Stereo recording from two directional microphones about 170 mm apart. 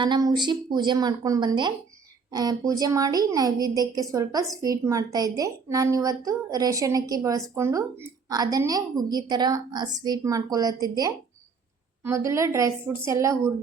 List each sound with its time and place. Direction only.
0.0 s a woman's voice: 25° right (ahead or behind)